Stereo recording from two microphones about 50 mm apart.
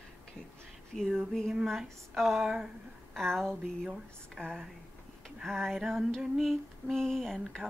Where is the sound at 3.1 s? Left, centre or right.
Centre.